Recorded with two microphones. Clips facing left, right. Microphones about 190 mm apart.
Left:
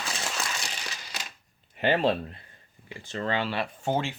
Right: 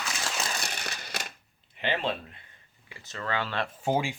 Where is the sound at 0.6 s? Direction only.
60° right (ahead or behind).